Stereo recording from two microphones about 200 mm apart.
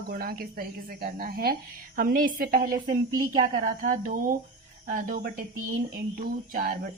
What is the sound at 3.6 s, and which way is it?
A woman's voice, 40° right (ahead or behind).